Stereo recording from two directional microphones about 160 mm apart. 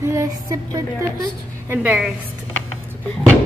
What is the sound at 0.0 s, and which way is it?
A woman's voice, 20° right (ahead or behind).